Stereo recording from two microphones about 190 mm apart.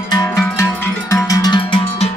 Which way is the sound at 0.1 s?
15° left (ahead or behind).